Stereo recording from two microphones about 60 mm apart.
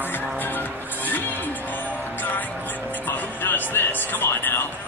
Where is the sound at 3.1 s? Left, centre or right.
Left.